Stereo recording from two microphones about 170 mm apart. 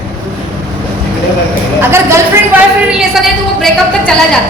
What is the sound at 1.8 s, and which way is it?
Speech, 15° right (ahead or behind).